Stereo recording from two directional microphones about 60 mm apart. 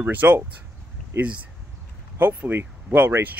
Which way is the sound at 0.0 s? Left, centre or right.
Right.